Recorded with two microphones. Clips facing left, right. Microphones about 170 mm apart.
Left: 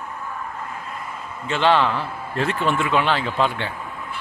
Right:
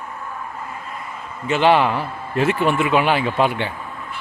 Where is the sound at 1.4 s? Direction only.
15° right (ahead or behind).